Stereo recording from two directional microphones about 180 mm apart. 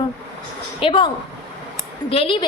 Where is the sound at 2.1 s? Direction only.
30° left (ahead or behind).